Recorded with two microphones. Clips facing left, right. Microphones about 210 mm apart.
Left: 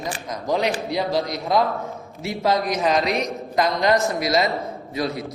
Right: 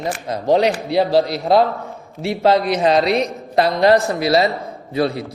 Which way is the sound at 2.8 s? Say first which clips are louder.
Right 6 dB; 35° right (ahead or behind).